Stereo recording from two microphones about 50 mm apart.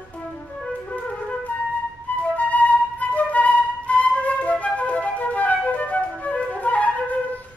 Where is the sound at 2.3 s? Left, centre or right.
Left.